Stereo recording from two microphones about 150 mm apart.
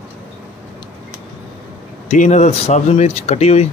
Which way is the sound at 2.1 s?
50° left (ahead or behind).